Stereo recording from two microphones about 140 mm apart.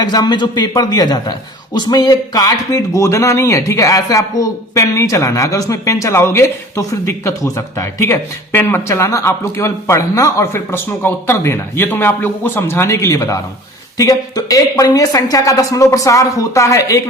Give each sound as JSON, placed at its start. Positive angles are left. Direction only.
{"t": 0.0, "sound": "a man's voice", "side_deg": 30}